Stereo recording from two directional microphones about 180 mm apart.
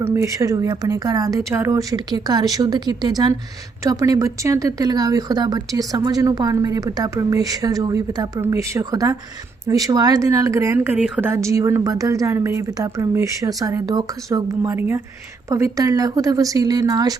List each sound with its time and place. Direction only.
0.0 s speech: 15° right (ahead or behind)